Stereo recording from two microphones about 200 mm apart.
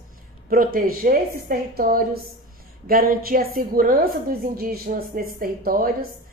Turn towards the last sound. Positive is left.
turn(degrees=-45)  # may be behind; listen again after turning